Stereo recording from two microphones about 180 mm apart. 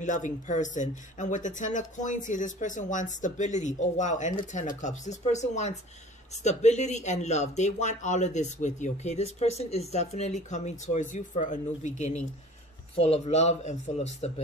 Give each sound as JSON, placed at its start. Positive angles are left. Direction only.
{"t": 0.0, "sound": "speech", "side_deg": 45}